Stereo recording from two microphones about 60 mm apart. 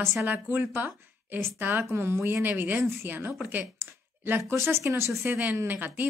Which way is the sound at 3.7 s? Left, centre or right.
Right.